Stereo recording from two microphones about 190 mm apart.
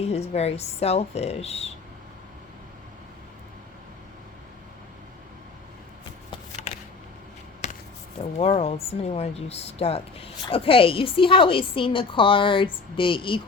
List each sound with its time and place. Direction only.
0.0 s a woman's voice: 35° left (ahead or behind)
6.7 s a sound: 35° left (ahead or behind)
7.6 s basketball bounce: 35° left (ahead or behind)
8.2 s speech: 30° left (ahead or behind)